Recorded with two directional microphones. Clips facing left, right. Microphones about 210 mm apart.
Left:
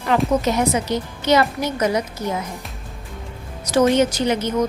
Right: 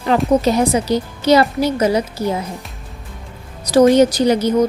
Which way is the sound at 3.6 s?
35° right (ahead or behind).